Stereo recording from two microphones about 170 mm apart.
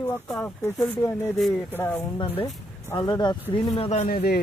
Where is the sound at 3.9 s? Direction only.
50° left (ahead or behind).